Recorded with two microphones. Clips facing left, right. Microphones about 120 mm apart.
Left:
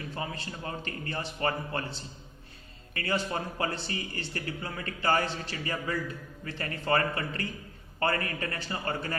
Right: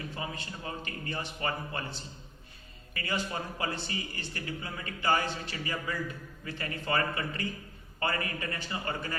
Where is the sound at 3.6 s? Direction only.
35° left (ahead or behind).